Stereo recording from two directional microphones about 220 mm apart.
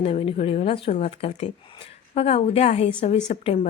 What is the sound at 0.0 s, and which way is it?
A woman's voice, 25° left (ahead or behind).